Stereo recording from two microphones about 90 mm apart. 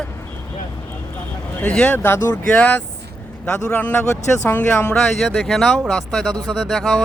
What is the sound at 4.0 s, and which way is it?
Speech, 35° left (ahead or behind).